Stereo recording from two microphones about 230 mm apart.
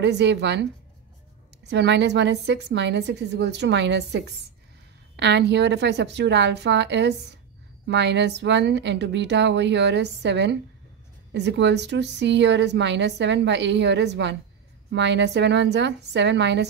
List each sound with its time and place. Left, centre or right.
0.0 s a woman's voice: right
1.7 s a woman's voice: right